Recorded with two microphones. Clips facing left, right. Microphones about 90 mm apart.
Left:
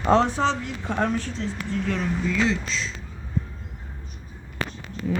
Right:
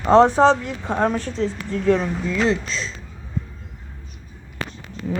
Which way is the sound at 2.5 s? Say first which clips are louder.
Right 4 dB; 40° right (ahead or behind).